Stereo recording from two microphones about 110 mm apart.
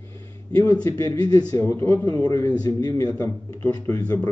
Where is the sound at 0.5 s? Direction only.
15° left (ahead or behind).